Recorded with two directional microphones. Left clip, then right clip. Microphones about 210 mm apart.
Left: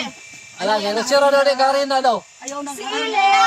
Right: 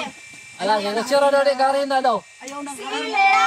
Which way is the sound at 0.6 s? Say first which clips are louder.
Left 1 dB; 5° left (ahead or behind).